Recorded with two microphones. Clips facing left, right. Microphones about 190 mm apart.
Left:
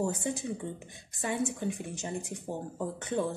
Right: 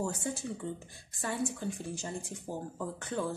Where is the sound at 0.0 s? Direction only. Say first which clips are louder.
Left 3 dB; 20° left (ahead or behind).